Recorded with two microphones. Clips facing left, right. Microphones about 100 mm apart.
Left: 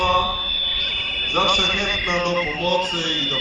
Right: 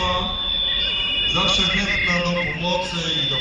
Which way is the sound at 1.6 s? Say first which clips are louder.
Even; 60° left (ahead or behind).